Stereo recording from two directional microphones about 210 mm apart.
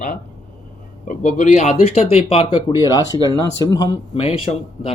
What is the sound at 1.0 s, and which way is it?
Speech, 35° left (ahead or behind).